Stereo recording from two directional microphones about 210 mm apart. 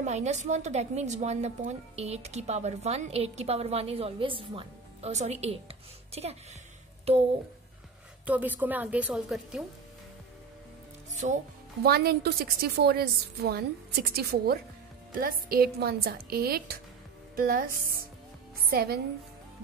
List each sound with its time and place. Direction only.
0.0 s a woman's voice: 35° right (ahead or behind)
7.1 s speech: 30° right (ahead or behind)
8.3 s a woman's voice: 10° right (ahead or behind)
11.2 s a woman's voice: 35° right (ahead or behind)
11.8 s a woman's voice: 50° right (ahead or behind)